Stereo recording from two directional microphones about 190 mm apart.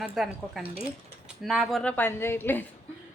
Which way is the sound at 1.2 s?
Centre (ahead or behind).